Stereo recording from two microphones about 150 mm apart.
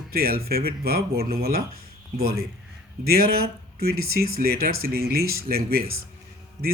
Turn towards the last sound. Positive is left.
turn(degrees=-25)  # may be behind; listen again after turning